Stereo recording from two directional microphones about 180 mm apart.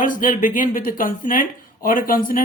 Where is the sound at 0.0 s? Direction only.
50° left (ahead or behind).